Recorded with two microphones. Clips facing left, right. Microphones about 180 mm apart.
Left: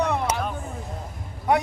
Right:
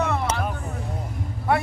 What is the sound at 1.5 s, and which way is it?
Speech, 20° left (ahead or behind).